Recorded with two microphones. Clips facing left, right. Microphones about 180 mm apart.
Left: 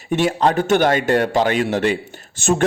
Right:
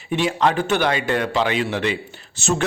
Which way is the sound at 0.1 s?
45° left (ahead or behind).